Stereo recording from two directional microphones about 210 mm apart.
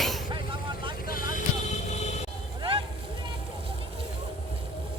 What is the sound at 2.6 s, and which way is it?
Vehicle, 25° right (ahead or behind).